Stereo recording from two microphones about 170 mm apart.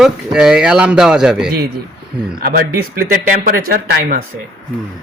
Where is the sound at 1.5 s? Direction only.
65° right (ahead or behind).